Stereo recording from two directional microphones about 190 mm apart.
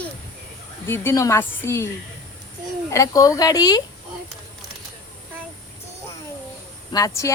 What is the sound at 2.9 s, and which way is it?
Speech, 15° left (ahead or behind).